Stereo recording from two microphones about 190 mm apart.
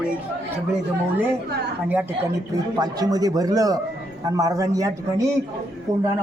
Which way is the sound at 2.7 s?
20° right (ahead or behind).